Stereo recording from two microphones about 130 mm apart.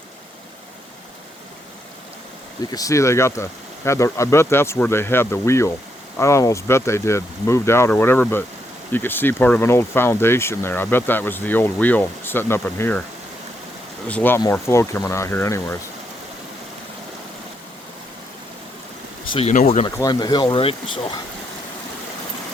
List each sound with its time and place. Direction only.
2.7 s speech: 25° left (ahead or behind)
14.1 s speech: 15° left (ahead or behind)
19.5 s speech: 65° left (ahead or behind)
20.0 s speech: 30° left (ahead or behind)